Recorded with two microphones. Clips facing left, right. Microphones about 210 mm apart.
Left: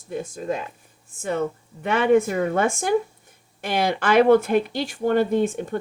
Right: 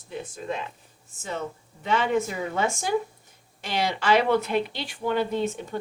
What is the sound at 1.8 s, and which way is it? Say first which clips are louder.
Speech: left 6 dB; 55° left (ahead or behind).